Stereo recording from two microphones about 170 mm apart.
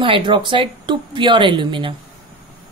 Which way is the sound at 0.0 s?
30° right (ahead or behind).